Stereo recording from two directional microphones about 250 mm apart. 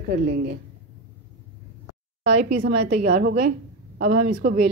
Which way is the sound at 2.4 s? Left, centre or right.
Right.